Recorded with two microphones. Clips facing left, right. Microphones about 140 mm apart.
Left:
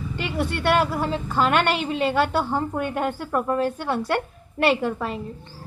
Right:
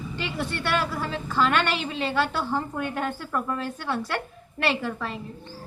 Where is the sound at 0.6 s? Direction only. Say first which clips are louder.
Left 7 dB; 55° left (ahead or behind).